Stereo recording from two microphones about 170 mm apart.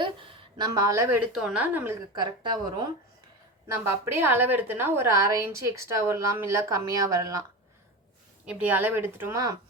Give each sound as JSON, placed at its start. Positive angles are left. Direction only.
{"t": 0.0, "sound": "a sound", "side_deg": -30}
{"t": 1.3, "sound": "a woman's voice", "side_deg": -5}
{"t": 2.1, "sound": "a woman's voice", "side_deg": -25}
{"t": 3.8, "sound": "a woman's voice", "side_deg": -15}
{"t": 8.4, "sound": "a woman's voice", "side_deg": -10}